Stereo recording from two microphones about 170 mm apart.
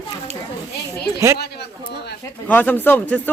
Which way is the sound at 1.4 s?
75° left (ahead or behind).